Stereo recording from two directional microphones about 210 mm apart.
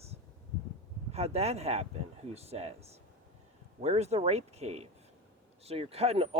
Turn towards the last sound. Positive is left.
turn(degrees=-30)  # may be behind; listen again after turning